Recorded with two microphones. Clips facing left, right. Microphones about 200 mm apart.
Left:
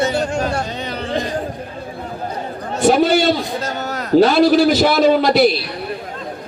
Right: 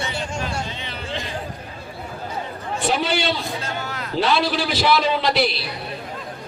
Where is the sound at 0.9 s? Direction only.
40° left (ahead or behind).